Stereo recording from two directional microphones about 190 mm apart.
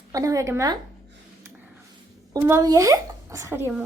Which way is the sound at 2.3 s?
15° right (ahead or behind).